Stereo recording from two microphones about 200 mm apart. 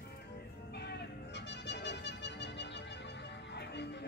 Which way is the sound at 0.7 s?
55° left (ahead or behind).